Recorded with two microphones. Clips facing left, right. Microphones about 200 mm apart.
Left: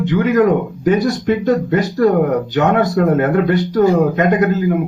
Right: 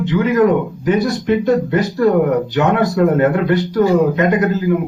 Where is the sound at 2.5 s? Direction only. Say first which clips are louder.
Left 2 dB; 45° left (ahead or behind).